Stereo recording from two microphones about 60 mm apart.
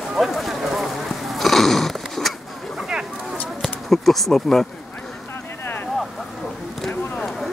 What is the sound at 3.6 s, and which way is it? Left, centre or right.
Speech, centre.